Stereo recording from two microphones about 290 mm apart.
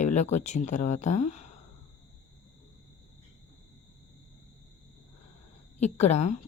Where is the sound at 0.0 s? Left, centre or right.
Left.